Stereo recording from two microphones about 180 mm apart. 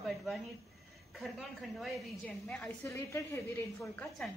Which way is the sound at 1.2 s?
Centre (ahead or behind).